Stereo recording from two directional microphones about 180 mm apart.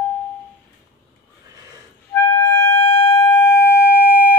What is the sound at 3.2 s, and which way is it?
Siren, 10° left (ahead or behind).